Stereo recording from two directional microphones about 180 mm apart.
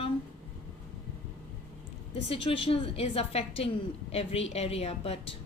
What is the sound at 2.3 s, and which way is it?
A woman's voice, 30° left (ahead or behind).